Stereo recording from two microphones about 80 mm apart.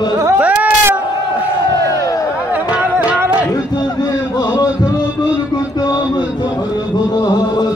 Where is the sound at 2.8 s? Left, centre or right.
Right.